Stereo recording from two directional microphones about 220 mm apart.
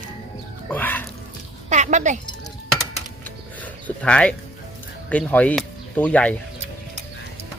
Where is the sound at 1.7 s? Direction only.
35° right (ahead or behind).